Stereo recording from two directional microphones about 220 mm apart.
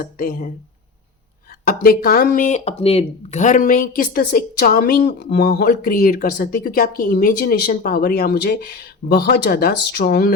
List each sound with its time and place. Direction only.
0.0 s speech: 40° left (ahead or behind)
1.6 s speech: 45° left (ahead or behind)